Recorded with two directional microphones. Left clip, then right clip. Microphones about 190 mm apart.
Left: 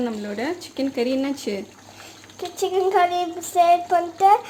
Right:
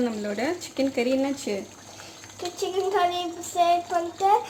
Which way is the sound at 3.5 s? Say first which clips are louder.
Left 5 dB; 40° left (ahead or behind).